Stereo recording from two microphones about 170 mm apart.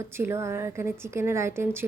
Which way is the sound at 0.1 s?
15° right (ahead or behind).